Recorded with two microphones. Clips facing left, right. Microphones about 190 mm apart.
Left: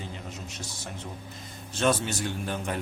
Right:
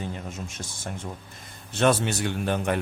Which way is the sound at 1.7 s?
65° right (ahead or behind).